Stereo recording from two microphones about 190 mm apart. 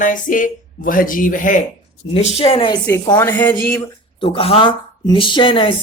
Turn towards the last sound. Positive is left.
turn(degrees=25)  # may be behind; listen again after turning